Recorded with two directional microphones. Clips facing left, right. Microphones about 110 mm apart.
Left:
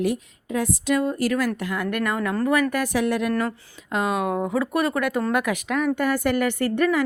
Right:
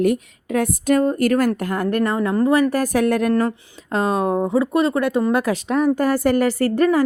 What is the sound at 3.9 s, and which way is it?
A woman's voice, 35° right (ahead or behind).